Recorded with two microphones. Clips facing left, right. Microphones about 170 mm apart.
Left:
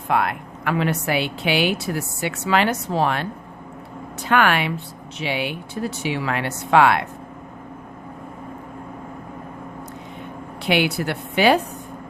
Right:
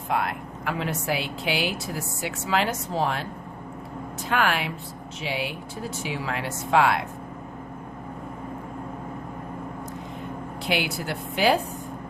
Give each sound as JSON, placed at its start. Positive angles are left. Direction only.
{"t": 0.1, "sound": "speech", "side_deg": 70}
{"t": 10.7, "sound": "speech", "side_deg": 65}